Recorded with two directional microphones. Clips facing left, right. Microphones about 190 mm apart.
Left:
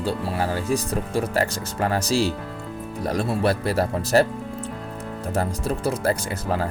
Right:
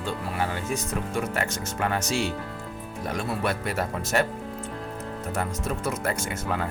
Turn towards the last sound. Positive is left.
turn(degrees=35)  # may be behind; listen again after turning